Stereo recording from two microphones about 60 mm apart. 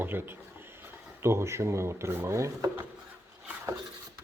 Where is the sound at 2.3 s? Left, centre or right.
Right.